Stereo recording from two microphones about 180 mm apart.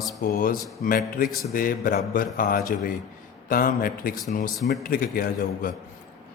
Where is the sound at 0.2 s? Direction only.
50° left (ahead or behind).